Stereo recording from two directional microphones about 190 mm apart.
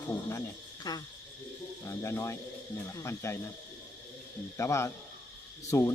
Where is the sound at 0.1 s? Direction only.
15° left (ahead or behind).